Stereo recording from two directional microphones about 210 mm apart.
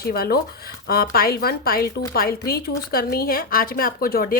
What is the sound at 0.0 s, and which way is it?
A woman's voice, 45° left (ahead or behind).